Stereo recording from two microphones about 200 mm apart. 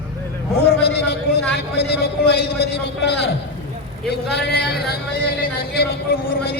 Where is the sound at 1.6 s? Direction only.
55° left (ahead or behind).